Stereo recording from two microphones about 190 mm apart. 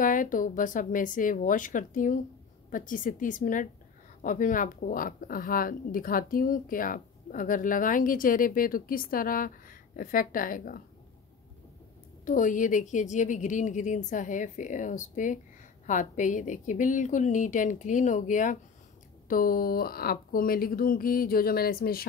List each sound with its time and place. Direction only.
0.0 s a woman's voice: 45° left (ahead or behind)
12.3 s a woman's voice: 45° left (ahead or behind)